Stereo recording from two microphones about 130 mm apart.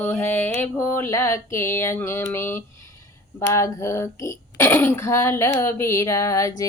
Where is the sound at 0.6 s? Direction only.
20° left (ahead or behind).